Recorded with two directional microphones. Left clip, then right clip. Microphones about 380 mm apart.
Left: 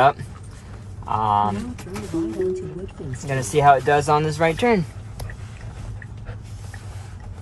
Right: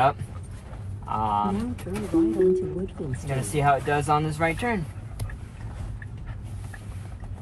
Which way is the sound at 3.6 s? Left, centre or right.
Left.